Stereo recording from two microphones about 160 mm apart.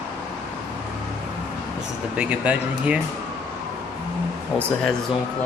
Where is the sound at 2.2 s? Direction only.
10° right (ahead or behind).